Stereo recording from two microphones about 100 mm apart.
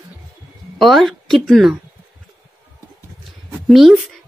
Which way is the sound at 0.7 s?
Centre (ahead or behind).